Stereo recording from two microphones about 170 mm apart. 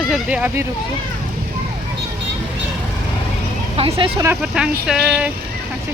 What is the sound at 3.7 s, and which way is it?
Speech, 35° right (ahead or behind).